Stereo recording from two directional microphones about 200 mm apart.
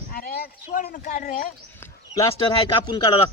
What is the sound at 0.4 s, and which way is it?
Speech, 45° left (ahead or behind).